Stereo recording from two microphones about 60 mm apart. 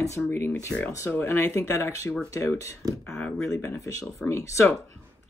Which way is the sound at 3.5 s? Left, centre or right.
Left.